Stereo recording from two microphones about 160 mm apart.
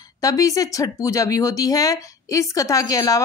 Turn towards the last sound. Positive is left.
turn(degrees=25)  # may be behind; listen again after turning